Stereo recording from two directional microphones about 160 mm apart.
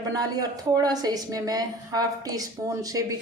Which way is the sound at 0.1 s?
25° right (ahead or behind).